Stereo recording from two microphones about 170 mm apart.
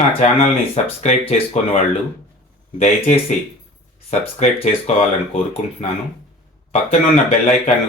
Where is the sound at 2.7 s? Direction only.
40° left (ahead or behind).